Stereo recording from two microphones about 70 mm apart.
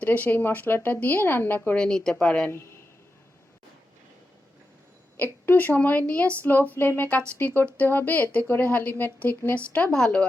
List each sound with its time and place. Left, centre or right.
0.0 s speech: left
1.7 s a woman's voice: centre
5.1 s speech: left
9.7 s a woman's voice: centre